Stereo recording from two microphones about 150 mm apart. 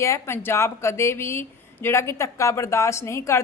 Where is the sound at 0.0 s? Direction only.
20° left (ahead or behind).